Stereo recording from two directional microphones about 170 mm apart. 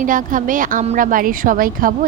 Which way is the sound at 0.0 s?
50° right (ahead or behind).